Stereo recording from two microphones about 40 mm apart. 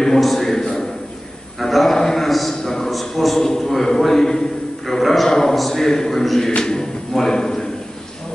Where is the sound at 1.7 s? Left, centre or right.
Centre.